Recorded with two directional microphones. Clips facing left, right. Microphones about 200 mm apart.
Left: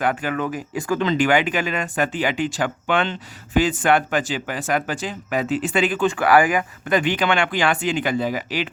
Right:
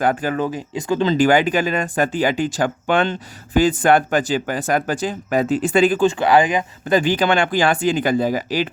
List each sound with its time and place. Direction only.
0.0 s speech: 35° right (ahead or behind)
6.1 s speech: 25° right (ahead or behind); by 8.7 s 40° right (ahead or behind)